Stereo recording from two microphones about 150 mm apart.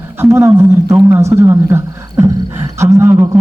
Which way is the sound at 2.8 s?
20° right (ahead or behind).